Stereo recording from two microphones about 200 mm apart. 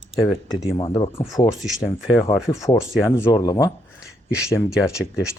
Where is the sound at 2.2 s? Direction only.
30° left (ahead or behind).